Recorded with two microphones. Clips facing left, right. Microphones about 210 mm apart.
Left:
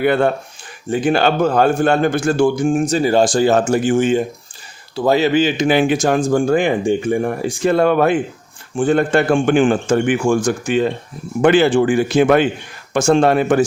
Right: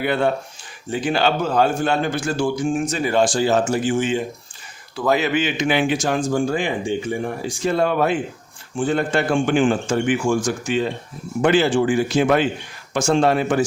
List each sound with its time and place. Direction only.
0.0 s speech: 50° left (ahead or behind)
2.9 s speech: 35° left (ahead or behind)
3.4 s speech: 50° left (ahead or behind)
4.9 s a man's voice: 30° left (ahead or behind); by 13.7 s 55° left (ahead or behind)